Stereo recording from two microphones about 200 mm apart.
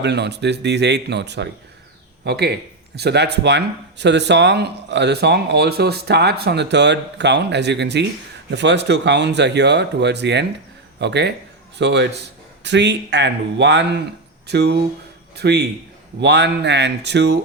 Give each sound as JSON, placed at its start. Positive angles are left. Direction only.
{"t": 0.0, "sound": "speech", "side_deg": -60}